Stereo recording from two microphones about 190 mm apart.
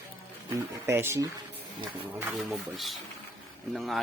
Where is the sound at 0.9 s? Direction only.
15° right (ahead or behind).